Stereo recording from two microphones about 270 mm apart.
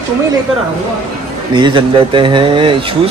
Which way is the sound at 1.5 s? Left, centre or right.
Centre.